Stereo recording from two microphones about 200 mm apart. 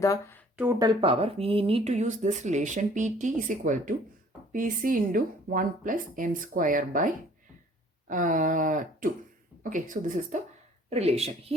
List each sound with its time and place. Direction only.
0.0 s speech: 15° left (ahead or behind)
0.5 s speech: 10° right (ahead or behind); by 11.5 s 30° right (ahead or behind)